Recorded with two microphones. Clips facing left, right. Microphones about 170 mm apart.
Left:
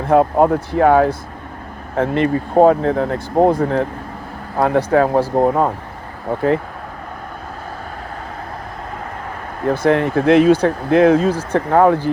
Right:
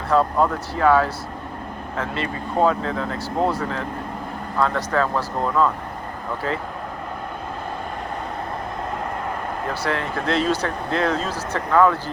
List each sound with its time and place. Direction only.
0.0 s speech: 55° left (ahead or behind)
9.6 s speech: 55° left (ahead or behind)
10.3 s speech: 10° left (ahead or behind)
10.9 s speech: 55° left (ahead or behind)